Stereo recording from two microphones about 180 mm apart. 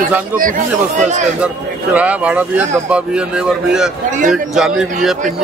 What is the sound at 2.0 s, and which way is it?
A man's voice, 10° right (ahead or behind).